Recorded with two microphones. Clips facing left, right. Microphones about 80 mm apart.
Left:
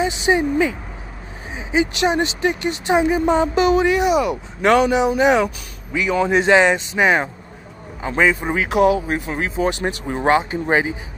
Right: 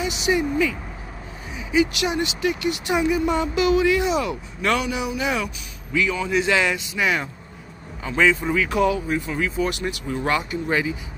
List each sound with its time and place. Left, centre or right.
0.0 s speech: left
4.6 s speech: left
8.6 s speech: left
9.0 s speech: left